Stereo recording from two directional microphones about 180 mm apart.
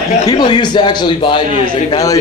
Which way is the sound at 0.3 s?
25° left (ahead or behind).